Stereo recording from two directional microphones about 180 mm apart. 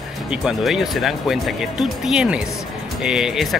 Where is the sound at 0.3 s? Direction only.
5° right (ahead or behind).